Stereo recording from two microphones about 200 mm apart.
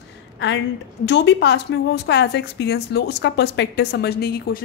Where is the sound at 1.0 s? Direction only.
60° left (ahead or behind).